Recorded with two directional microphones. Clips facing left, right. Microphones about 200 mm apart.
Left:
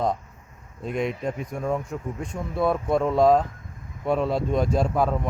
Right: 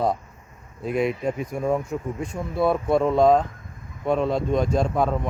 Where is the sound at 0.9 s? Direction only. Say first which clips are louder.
Right 3 dB; 5° right (ahead or behind).